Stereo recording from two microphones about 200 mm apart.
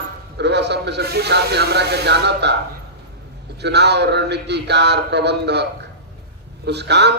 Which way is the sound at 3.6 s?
60° right (ahead or behind).